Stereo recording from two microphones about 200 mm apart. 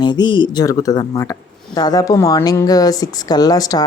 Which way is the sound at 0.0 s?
20° left (ahead or behind).